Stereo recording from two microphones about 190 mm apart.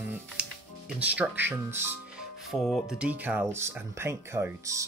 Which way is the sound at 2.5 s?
Centre (ahead or behind).